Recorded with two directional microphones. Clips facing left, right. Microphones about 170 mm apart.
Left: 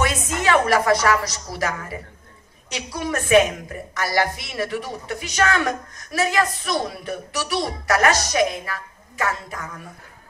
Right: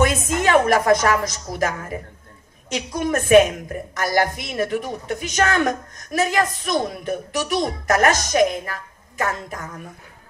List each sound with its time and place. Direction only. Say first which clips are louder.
0.0 s a sound: right 4 dB; 45° right (ahead or behind)
0.4 s speech: right 1 dB; 45° right (ahead or behind)
3.0 s speech: right 3 dB; 50° right (ahead or behind)